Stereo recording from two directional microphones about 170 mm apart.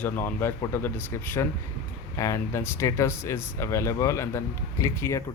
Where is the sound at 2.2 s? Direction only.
15° left (ahead or behind).